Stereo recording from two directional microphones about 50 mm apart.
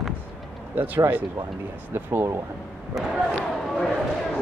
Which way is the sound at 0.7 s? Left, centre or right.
Right.